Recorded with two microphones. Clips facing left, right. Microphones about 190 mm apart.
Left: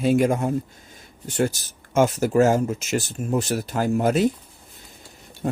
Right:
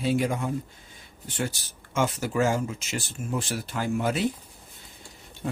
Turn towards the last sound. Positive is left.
turn(degrees=45)  # may be behind; listen again after turning